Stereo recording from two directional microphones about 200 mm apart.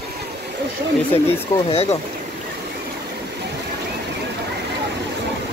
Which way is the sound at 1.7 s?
30° left (ahead or behind).